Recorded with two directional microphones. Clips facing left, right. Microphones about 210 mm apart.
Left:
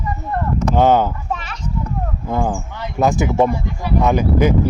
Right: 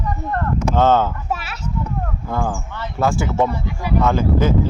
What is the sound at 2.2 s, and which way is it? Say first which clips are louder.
Speech: left 4 dB; 20° left (ahead or behind).